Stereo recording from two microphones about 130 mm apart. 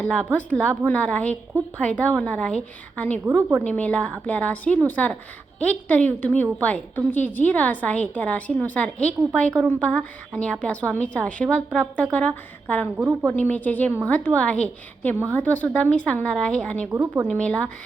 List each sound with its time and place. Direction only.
0.0 s a woman's voice: 5° left (ahead or behind)
13.0 s a woman's voice: 15° right (ahead or behind)
13.3 s a woman's voice: 10° left (ahead or behind)
16.9 s a woman's voice: 15° right (ahead or behind)
17.2 s a woman's voice: 5° left (ahead or behind)